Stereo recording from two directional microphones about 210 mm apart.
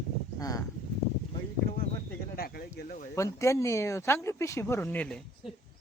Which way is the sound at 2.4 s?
45° left (ahead or behind).